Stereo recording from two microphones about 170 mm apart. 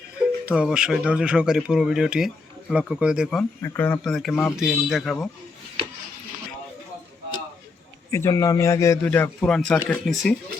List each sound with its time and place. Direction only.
0.4 s speech: 5° right (ahead or behind)
3.6 s a man's voice: 15° left (ahead or behind)
8.1 s a man's voice: 20° left (ahead or behind)